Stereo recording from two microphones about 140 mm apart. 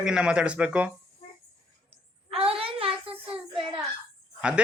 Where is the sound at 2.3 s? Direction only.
45° right (ahead or behind).